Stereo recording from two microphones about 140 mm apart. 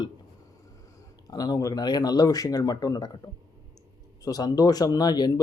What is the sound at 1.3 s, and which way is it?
Speech, 25° left (ahead or behind).